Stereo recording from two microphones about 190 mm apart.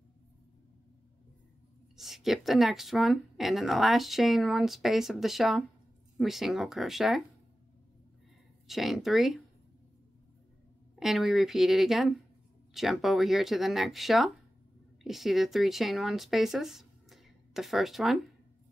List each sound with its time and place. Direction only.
2.0 s speech: centre (ahead or behind)
8.6 s speech: centre (ahead or behind)
11.0 s speech: centre (ahead or behind)